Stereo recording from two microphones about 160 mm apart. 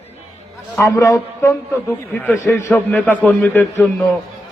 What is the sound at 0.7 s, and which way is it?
A man's voice, 20° left (ahead or behind).